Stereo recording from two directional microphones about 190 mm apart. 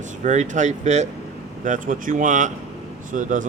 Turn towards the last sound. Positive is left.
turn(degrees=-45)  # may be behind; listen again after turning